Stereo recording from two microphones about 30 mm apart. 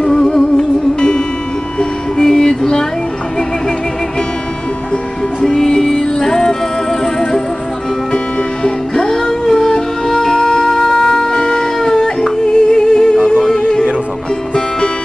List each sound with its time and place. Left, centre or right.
0.2 s music: centre
1.8 s music: left
5.4 s music: centre
8.6 s music: centre